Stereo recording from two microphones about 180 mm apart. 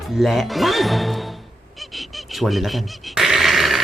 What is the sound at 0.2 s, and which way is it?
Speech, centre (ahead or behind).